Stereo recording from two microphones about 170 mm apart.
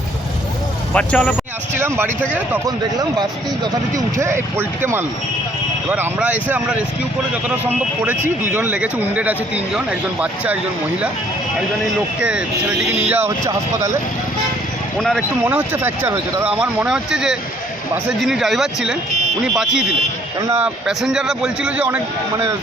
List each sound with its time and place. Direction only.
0.9 s speech: 5° left (ahead or behind)
2.6 s speech: 25° right (ahead or behind); by 10.6 s 10° right (ahead or behind)
12.9 s speech: 10° right (ahead or behind)
14.9 s a man's voice: 5° left (ahead or behind)
15.4 s a man's voice: 10° right (ahead or behind)
20.8 s a man's voice: 5° right (ahead or behind)